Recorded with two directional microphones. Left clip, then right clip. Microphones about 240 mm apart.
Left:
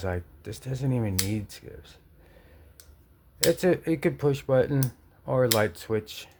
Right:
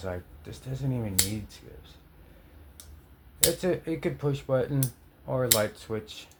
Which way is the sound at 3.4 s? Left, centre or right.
Left.